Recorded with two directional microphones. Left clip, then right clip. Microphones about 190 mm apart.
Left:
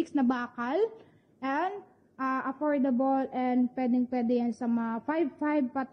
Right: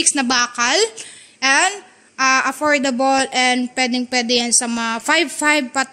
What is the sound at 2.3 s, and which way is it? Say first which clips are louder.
A woman's voice: right 11 dB; 20° right (ahead or behind).